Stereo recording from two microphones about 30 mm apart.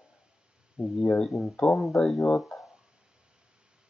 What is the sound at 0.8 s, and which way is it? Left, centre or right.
Speech, right.